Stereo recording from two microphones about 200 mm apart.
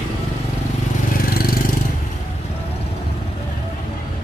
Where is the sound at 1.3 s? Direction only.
50° left (ahead or behind).